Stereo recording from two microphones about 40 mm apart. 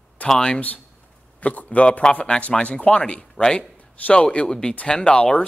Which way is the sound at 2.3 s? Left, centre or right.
Left.